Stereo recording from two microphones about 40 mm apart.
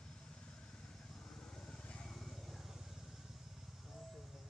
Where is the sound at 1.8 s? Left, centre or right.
Left.